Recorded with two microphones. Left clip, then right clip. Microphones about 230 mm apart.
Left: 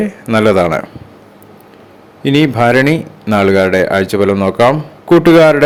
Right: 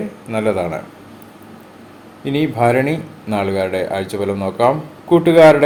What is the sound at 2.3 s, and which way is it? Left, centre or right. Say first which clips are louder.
Speech: left 5 dB; left.